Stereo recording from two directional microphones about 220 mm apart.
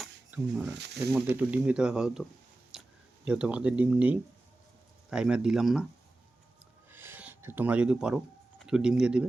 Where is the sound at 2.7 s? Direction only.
Centre (ahead or behind).